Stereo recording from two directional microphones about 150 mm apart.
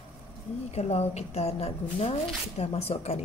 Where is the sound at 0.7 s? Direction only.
45° left (ahead or behind).